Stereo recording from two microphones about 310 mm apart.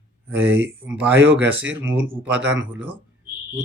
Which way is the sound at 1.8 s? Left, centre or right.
Centre.